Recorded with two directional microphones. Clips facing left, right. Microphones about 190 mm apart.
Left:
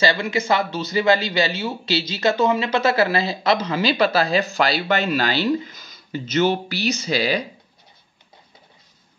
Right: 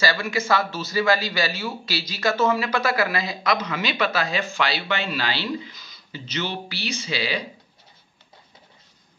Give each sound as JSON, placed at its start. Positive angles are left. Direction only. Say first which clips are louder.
{"t": 0.0, "sound": "a man's voice", "louder": "left 3 dB", "side_deg": 20}